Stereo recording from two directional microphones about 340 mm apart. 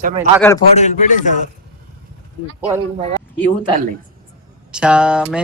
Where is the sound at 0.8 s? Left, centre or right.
Left.